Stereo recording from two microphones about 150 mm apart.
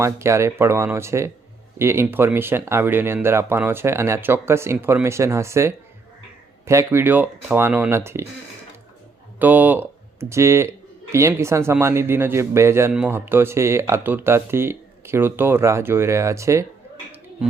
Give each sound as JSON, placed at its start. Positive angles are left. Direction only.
{"t": 0.0, "sound": "speech", "side_deg": -20}
{"t": 9.4, "sound": "speech", "side_deg": -10}